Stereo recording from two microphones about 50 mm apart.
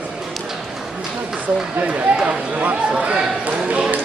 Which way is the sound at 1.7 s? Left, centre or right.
Right.